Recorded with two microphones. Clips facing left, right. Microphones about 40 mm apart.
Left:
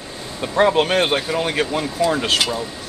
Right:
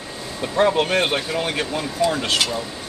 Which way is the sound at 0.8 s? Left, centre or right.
Left.